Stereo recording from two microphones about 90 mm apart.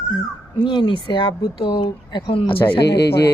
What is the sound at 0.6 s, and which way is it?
Speech, 65° left (ahead or behind).